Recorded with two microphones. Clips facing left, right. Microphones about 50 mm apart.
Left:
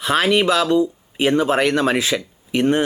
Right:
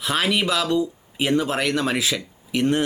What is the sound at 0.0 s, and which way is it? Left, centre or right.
Speech, centre.